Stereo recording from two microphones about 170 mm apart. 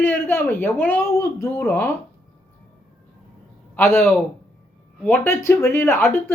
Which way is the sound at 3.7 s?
15° left (ahead or behind).